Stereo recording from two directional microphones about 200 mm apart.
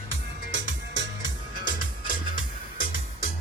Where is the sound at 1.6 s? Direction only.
45° left (ahead or behind).